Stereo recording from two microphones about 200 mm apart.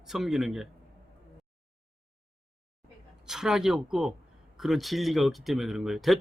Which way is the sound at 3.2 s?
Centre (ahead or behind).